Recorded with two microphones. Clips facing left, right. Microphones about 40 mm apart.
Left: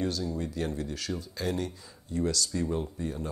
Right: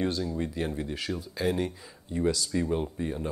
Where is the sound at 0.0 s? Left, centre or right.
Right.